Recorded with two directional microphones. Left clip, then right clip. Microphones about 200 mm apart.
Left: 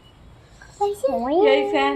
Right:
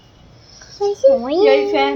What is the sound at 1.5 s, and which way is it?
Speech, 25° right (ahead or behind).